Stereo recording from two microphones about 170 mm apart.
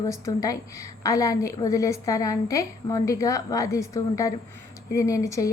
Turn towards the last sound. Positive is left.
turn(degrees=20)  # may be behind; listen again after turning